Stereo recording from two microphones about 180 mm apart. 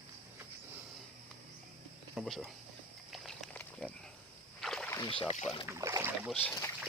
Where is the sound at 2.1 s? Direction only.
Centre (ahead or behind).